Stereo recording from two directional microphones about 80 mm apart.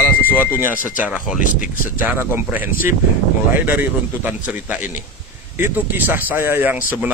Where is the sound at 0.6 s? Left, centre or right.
Right.